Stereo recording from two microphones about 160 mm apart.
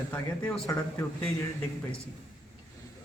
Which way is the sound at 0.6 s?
20° left (ahead or behind).